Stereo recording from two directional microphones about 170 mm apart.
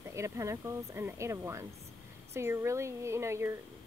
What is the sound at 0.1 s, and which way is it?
Speech, 15° right (ahead or behind).